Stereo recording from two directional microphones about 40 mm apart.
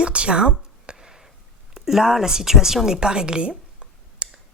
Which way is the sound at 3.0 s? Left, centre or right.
Right.